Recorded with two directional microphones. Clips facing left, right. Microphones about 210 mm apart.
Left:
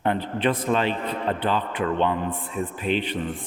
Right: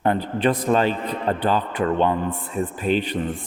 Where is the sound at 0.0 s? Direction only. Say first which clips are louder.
Right 3 dB; 40° right (ahead or behind).